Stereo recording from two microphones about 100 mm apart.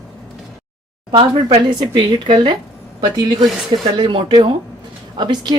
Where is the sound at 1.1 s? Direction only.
60° right (ahead or behind).